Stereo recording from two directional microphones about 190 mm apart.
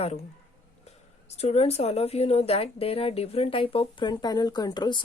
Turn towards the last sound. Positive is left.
turn(degrees=20)  # may be behind; listen again after turning